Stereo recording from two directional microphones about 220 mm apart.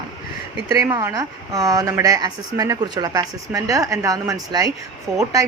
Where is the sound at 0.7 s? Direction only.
15° right (ahead or behind).